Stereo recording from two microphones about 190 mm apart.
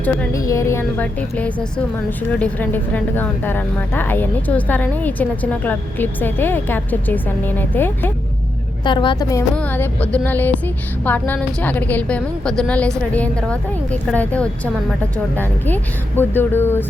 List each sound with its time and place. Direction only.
0.0 s a woman's voice: 10° left (ahead or behind)
8.8 s a woman's voice: 25° left (ahead or behind)
9.6 s a woman's voice: 10° left (ahead or behind)